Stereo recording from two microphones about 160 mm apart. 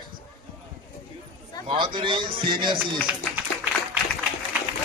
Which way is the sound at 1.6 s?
30° right (ahead or behind).